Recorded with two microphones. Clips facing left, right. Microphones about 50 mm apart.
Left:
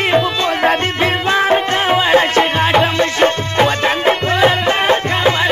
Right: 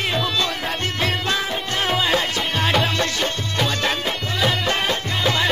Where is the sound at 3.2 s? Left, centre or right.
Left.